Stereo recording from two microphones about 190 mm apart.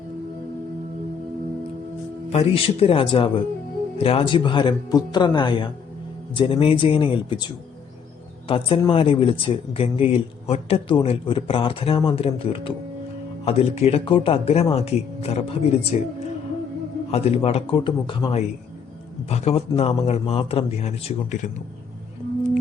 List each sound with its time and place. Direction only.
2.3 s speech: 30° left (ahead or behind)